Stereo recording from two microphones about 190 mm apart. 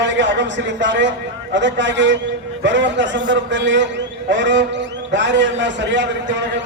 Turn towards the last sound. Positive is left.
turn(degrees=-70)  # may be behind; listen again after turning